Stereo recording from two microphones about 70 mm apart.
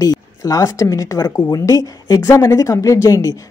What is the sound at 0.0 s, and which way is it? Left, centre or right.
A woman's voice, left.